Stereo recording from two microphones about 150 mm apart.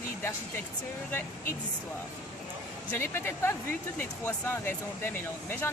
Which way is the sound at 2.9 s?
15° left (ahead or behind).